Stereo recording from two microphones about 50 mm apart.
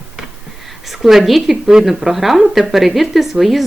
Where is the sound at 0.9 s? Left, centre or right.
Centre.